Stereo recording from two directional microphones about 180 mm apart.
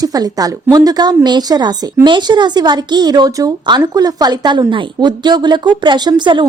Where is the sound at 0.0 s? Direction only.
20° right (ahead or behind).